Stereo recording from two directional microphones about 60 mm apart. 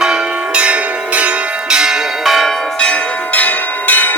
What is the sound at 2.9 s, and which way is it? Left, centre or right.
Church bell, left.